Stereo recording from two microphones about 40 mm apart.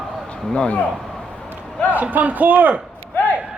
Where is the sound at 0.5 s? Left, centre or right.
Left.